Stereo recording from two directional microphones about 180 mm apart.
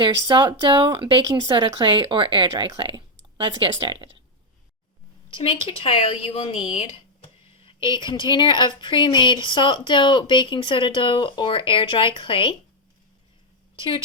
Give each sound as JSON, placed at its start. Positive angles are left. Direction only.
{"t": 0.3, "sound": "speech", "side_deg": -25}
{"t": 5.3, "sound": "a woman's voice", "side_deg": 30}